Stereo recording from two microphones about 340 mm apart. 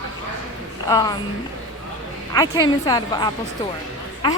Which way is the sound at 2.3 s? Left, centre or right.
Centre.